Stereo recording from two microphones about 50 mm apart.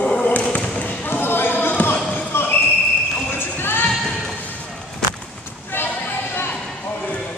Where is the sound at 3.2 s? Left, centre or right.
Left.